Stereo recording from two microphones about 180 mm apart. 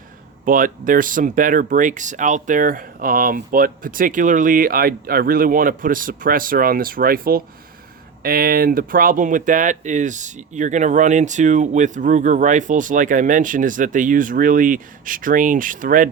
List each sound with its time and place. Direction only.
0.4 s speech: 50° right (ahead or behind)